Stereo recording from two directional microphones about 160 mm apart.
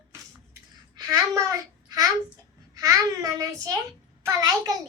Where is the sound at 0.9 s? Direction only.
25° right (ahead or behind).